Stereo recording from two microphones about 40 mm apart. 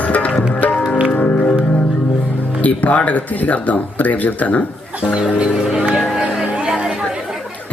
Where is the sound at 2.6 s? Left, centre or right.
Left.